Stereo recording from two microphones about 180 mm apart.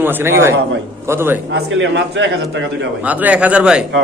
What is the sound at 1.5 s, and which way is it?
Speech, 85° right.